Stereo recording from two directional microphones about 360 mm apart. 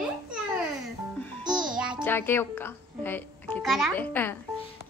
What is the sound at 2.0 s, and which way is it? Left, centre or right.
A child's voice, centre.